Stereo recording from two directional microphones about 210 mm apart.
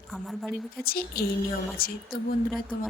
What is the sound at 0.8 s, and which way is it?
A woman's voice, 45° left (ahead or behind).